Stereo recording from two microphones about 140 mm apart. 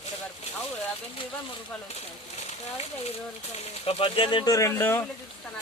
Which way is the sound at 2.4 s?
50° left (ahead or behind).